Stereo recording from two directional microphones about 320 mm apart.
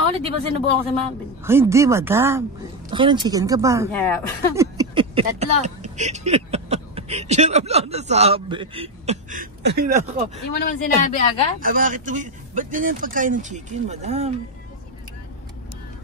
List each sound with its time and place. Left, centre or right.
0.2 s speech: centre
3.9 s speech: centre
4.6 s speech: centre
10.6 s speech: left
11.6 s speech: right